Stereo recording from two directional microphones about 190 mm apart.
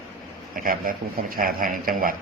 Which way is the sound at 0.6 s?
50° right (ahead or behind).